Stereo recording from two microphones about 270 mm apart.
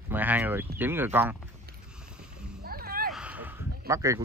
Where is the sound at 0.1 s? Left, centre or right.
Centre.